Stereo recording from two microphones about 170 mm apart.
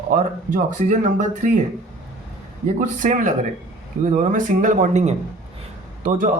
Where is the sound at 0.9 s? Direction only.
45° right (ahead or behind).